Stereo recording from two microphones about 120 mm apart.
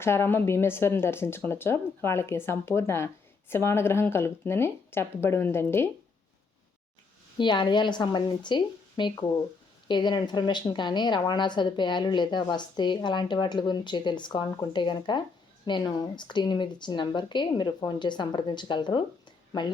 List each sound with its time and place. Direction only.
0.0 s speech: 20° left (ahead or behind)
7.3 s a woman's voice: 40° left (ahead or behind)